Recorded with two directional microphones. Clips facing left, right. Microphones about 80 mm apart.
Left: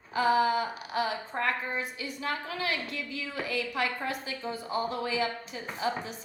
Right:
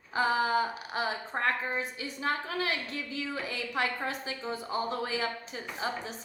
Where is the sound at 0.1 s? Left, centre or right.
Right.